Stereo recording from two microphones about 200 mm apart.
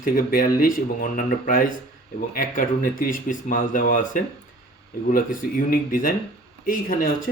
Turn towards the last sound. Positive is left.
turn(degrees=45)  # may be behind; listen again after turning